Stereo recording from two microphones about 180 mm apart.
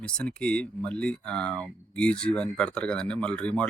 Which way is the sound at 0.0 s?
5° left (ahead or behind).